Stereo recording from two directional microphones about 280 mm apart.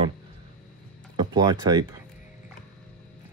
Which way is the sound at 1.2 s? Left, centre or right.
Centre.